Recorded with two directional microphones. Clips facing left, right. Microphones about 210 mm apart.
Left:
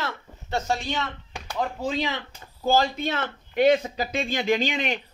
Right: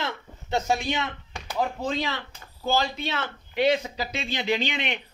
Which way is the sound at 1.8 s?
15° left (ahead or behind).